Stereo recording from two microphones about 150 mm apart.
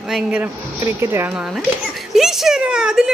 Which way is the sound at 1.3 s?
5° right (ahead or behind).